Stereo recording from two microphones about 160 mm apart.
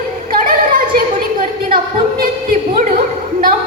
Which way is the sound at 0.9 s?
60° right (ahead or behind).